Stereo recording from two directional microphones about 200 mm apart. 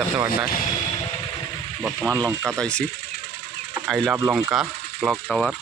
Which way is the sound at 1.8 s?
Centre (ahead or behind).